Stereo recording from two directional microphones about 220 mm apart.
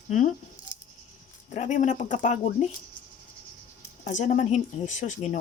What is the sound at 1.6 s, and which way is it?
Speech, 35° left (ahead or behind).